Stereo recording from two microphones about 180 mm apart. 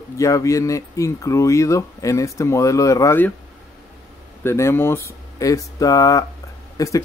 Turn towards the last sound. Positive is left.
turn(degrees=20)  # may be behind; listen again after turning